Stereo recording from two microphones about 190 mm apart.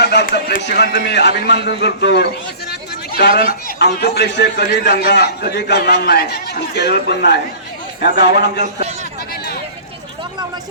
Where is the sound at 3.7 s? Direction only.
60° left (ahead or behind).